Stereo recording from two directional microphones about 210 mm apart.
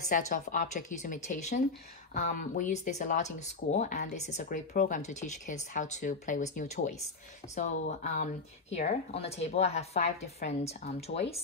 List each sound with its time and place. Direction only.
0.1 s speech: 40° left (ahead or behind)